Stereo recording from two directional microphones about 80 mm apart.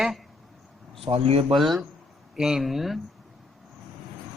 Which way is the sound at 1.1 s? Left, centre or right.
Right.